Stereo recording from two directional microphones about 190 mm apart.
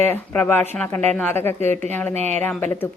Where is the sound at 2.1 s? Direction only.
35° right (ahead or behind).